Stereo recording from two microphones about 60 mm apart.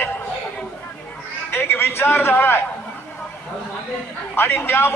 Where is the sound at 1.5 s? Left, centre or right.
Left.